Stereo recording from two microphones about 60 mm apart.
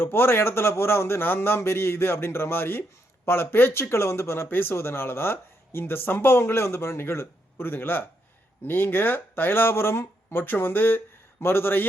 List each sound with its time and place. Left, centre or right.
0.0 s a man's voice: left